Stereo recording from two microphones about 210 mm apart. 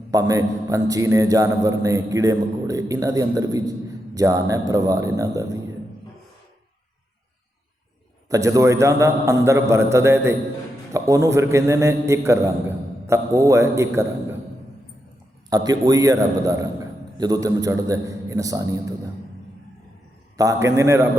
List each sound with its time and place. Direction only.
0.1 s a man's voice: 15° right (ahead or behind)
8.3 s a man's voice: 15° right (ahead or behind)
15.4 s a man's voice: 20° right (ahead or behind)
20.3 s a man's voice: 15° right (ahead or behind)